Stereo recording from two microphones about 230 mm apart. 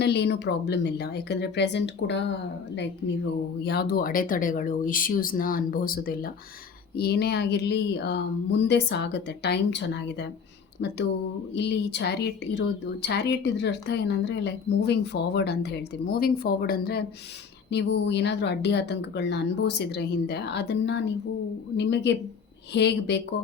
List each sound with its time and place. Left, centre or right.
0.0 s a woman's voice: left
3.6 s a woman's voice: left